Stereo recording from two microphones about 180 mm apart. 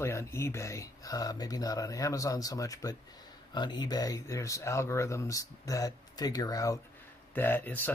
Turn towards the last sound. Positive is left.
turn(degrees=10)  # may be behind; listen again after turning